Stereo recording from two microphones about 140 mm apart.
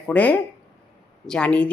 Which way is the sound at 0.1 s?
10° left (ahead or behind).